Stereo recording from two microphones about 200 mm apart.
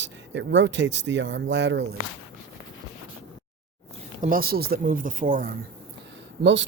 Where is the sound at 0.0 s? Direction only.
65° right (ahead or behind).